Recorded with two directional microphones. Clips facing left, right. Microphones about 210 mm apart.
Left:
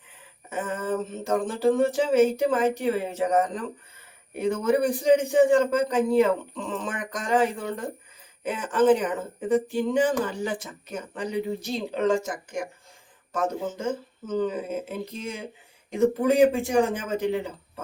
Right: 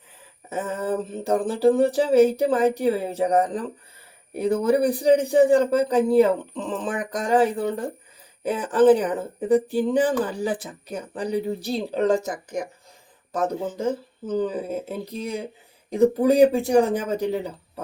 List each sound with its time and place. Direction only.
0.5 s speech: 35° right (ahead or behind)